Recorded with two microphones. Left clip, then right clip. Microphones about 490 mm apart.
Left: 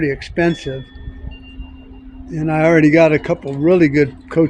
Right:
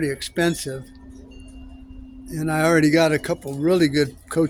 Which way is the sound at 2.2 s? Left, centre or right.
Right.